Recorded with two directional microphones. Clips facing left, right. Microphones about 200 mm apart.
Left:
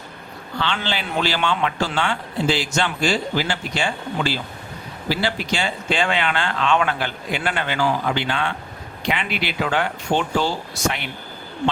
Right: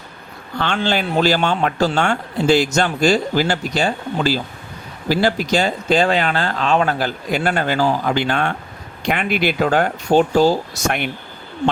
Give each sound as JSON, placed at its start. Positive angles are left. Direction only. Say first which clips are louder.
{"t": 0.6, "sound": "a man's voice", "louder": "right 6 dB", "side_deg": -45}